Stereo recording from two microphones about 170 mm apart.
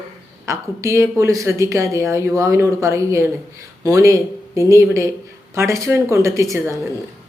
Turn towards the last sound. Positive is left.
turn(degrees=-20)  # may be behind; listen again after turning